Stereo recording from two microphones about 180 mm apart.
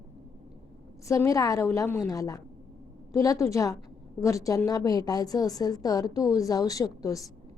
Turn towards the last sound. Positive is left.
turn(degrees=20)  # may be behind; listen again after turning